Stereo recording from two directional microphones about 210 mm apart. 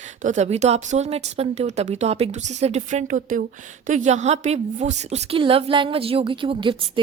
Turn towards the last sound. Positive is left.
turn(degrees=-25)  # may be behind; listen again after turning